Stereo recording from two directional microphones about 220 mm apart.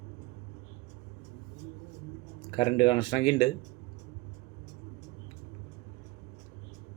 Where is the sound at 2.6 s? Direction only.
20° left (ahead or behind).